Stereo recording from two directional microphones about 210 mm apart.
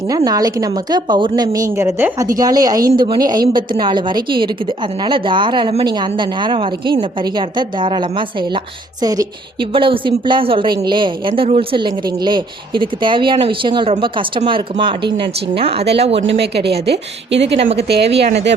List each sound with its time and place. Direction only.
0.3 s a woman's voice: 15° right (ahead or behind)
16.4 s a woman's voice: 50° right (ahead or behind)